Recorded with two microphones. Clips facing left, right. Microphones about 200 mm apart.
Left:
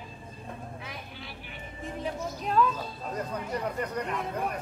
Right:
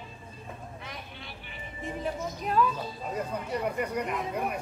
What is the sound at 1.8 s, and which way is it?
Music, centre (ahead or behind).